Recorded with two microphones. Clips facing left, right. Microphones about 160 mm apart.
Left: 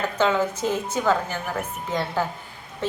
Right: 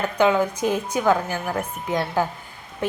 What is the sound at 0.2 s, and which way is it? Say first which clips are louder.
A woman's voice: right 3 dB; 15° right (ahead or behind).